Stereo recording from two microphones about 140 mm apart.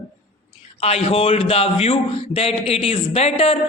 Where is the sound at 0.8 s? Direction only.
45° left (ahead or behind).